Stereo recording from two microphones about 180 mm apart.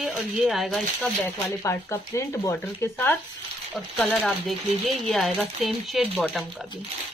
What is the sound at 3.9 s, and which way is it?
Speech, centre (ahead or behind).